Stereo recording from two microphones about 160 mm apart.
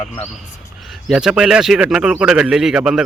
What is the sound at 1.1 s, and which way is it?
Speech, 5° right (ahead or behind).